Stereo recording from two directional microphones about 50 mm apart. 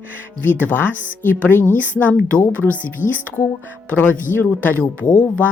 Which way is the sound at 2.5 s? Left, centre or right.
Right.